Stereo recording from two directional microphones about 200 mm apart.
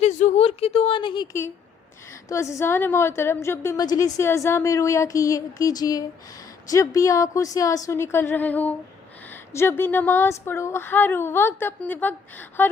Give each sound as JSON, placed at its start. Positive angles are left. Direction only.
{"t": 0.0, "sound": "a woman's voice", "side_deg": 35}